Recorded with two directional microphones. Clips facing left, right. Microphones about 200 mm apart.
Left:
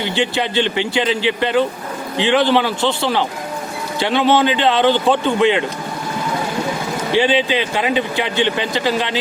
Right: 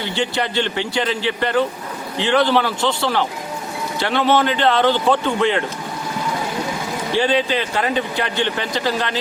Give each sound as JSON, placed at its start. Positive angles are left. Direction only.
{"t": 0.0, "sound": "speech", "side_deg": 20}
{"t": 7.1, "sound": "speech", "side_deg": 20}